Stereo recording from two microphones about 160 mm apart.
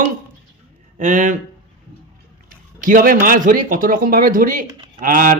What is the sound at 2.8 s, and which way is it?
Speech, 60° right (ahead or behind).